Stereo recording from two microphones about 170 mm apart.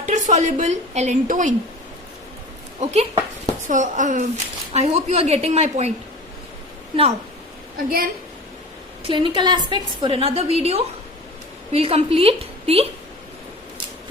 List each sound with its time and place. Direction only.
0.0 s a woman's voice: 45° right (ahead or behind)
2.8 s a woman's voice: 40° right (ahead or behind)
7.9 s a woman's voice: 60° right (ahead or behind)
9.0 s a woman's voice: 30° right (ahead or behind)